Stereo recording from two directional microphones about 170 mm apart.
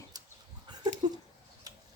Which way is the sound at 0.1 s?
20° right (ahead or behind).